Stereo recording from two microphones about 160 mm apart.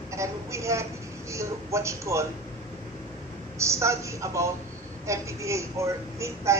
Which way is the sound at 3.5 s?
20° right (ahead or behind).